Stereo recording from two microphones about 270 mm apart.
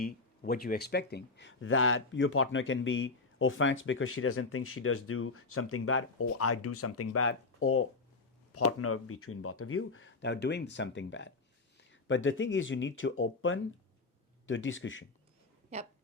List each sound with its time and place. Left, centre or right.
0.0 s speech: left